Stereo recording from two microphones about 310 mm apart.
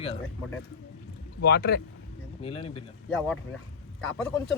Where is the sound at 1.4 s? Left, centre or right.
Left.